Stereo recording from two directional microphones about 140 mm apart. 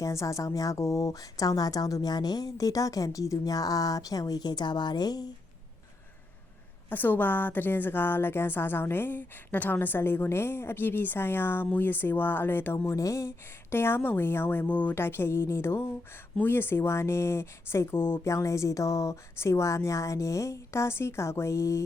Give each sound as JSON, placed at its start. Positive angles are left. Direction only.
{"t": 0.0, "sound": "speech", "side_deg": 20}
{"t": 6.9, "sound": "a woman's voice", "side_deg": 15}